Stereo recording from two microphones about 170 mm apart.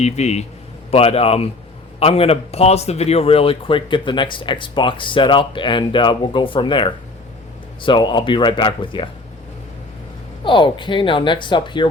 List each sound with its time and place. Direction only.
0.0 s a man's voice: 40° left (ahead or behind)
10.4 s speech: 30° left (ahead or behind)